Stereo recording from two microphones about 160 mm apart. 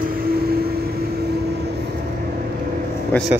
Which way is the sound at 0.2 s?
70° right (ahead or behind).